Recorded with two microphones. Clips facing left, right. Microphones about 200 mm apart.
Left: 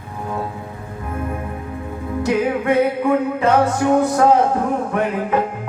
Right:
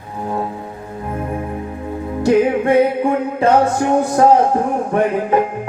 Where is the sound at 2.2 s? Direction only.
30° right (ahead or behind).